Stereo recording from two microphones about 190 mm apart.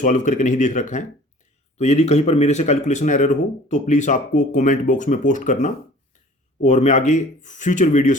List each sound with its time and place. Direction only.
0.0 s speech: 40° left (ahead or behind)